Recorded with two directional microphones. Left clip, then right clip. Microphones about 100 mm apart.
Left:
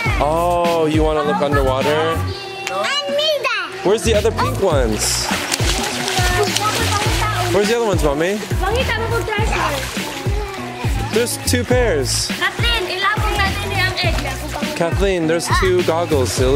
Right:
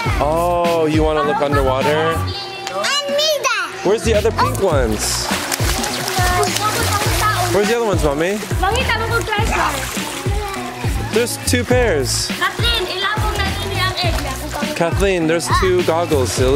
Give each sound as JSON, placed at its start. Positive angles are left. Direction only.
{"t": 0.2, "sound": "music", "side_deg": 5}
{"t": 1.1, "sound": "speech", "side_deg": -5}
{"t": 2.8, "sound": "a sound", "side_deg": -35}
{"t": 3.8, "sound": "speech", "side_deg": 5}
{"t": 5.3, "sound": "music", "side_deg": -15}
{"t": 7.5, "sound": "speech", "side_deg": 0}
{"t": 9.5, "sound": "music", "side_deg": -40}
{"t": 11.1, "sound": "speech", "side_deg": -5}
{"t": 12.4, "sound": "music", "side_deg": -15}
{"t": 14.6, "sound": "speech", "side_deg": 0}